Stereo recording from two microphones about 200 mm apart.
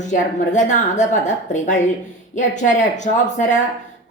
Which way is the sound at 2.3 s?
35° left (ahead or behind).